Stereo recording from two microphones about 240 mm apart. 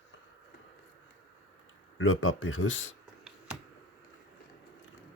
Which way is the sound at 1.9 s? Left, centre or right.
Left.